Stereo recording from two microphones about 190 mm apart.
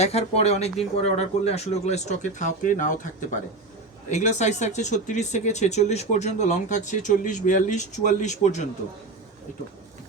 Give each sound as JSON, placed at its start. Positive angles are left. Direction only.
{"t": 0.0, "sound": "speech", "side_deg": 35}